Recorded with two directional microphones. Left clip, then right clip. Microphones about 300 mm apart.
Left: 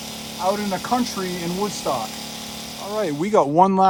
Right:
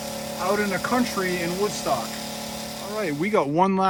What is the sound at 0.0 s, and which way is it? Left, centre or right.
Speech, centre.